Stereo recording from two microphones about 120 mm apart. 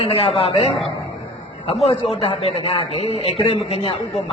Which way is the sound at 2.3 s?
55° left (ahead or behind).